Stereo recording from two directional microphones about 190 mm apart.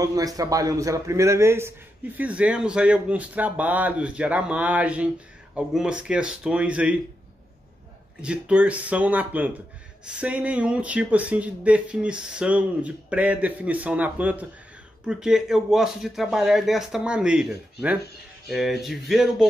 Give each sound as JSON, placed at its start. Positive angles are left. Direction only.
{"t": 0.0, "sound": "speech", "side_deg": -20}
{"t": 8.2, "sound": "speech", "side_deg": -5}